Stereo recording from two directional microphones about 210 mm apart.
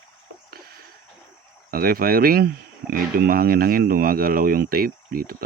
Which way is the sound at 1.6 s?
45° right (ahead or behind).